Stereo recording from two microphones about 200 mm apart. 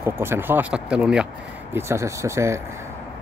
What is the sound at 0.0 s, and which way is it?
Speech, 10° right (ahead or behind).